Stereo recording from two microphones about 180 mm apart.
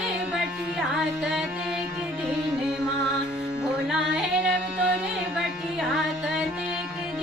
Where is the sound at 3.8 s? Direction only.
5° right (ahead or behind).